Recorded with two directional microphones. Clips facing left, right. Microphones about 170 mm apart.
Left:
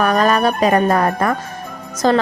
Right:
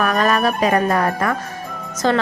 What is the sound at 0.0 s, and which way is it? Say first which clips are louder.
A woman's voice: left 3 dB; 35° left (ahead or behind).